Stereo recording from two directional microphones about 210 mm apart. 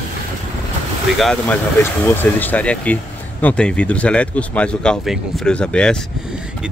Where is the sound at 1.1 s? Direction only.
Centre (ahead or behind).